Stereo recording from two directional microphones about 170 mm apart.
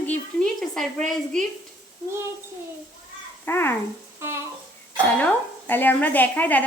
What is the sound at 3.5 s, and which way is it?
Speech, 15° left (ahead or behind).